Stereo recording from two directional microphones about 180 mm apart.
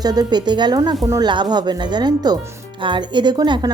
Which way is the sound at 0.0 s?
20° right (ahead or behind).